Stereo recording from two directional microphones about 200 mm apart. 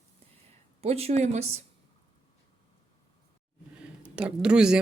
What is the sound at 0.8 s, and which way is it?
Speech, 30° right (ahead or behind).